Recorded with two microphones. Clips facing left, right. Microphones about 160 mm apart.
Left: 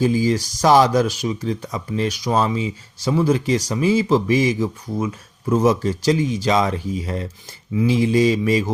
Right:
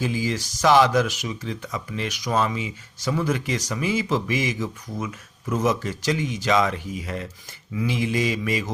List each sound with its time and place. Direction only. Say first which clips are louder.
0.0 s speech: left 8 dB; 40° left (ahead or behind)